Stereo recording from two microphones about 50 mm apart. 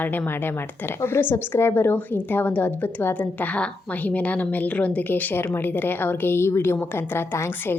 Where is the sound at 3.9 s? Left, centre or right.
Left.